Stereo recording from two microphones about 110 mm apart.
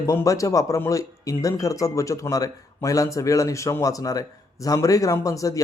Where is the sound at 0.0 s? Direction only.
30° left (ahead or behind).